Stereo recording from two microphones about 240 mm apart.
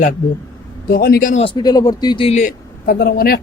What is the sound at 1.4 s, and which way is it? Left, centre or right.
Speech, centre.